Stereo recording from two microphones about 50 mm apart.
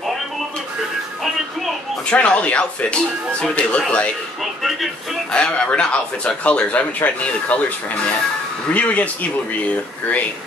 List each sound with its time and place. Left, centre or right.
2.0 s speech: left
4.4 s music: centre
5.3 s speech: left